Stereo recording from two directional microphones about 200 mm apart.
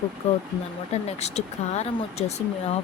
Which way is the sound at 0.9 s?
35° left (ahead or behind).